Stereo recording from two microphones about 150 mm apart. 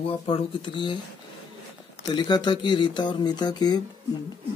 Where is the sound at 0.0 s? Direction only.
35° left (ahead or behind).